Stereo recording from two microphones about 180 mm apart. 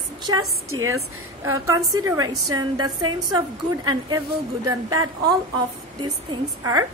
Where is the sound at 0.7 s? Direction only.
90° right.